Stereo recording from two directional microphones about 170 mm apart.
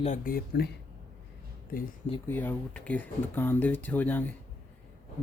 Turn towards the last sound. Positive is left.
turn(degrees=10)  # may be behind; listen again after turning